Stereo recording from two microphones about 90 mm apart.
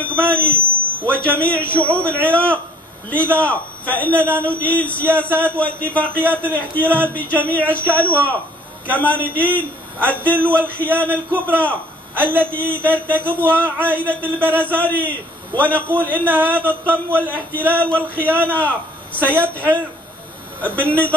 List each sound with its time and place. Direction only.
0.0 s a man's voice: 15° left (ahead or behind)